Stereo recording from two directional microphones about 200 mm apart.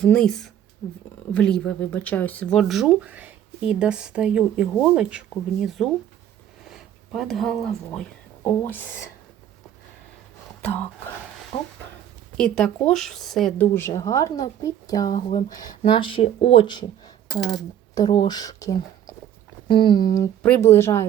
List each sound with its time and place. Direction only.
0.0 s speech: 5° left (ahead or behind)
10.6 s speech: 10° left (ahead or behind)
12.4 s speech: 5° left (ahead or behind)
13.7 s speech: 15° left (ahead or behind)
20.4 s speech: 10° left (ahead or behind)